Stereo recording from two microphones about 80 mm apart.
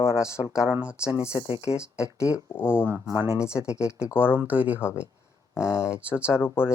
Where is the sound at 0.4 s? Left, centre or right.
Left.